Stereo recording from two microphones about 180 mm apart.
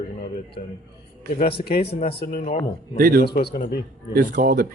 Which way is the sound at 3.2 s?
60° left (ahead or behind).